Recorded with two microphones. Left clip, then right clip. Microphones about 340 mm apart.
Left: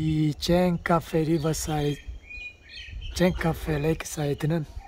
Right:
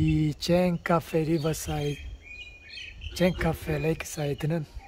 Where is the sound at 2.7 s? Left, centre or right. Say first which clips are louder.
Right 5 dB; right.